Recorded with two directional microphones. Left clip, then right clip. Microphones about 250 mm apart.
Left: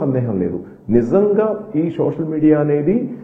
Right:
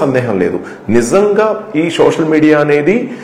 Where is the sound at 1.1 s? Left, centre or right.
Centre.